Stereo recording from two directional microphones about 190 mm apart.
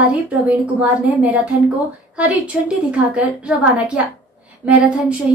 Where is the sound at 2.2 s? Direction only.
5° right (ahead or behind).